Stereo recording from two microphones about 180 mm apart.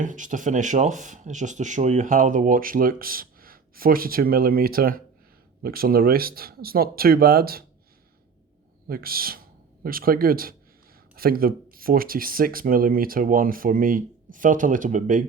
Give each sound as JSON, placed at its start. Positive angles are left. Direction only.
{"t": 0.0, "sound": "speech", "side_deg": -45}
{"t": 8.9, "sound": "speech", "side_deg": -55}